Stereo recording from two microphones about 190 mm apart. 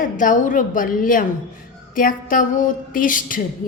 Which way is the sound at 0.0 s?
45° left (ahead or behind).